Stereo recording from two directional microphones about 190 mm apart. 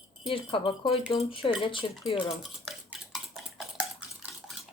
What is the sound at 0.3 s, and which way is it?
Speech, 30° left (ahead or behind).